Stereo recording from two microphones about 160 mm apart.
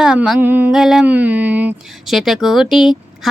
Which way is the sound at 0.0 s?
5° right (ahead or behind).